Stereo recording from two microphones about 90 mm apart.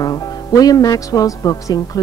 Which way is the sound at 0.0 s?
45° left (ahead or behind).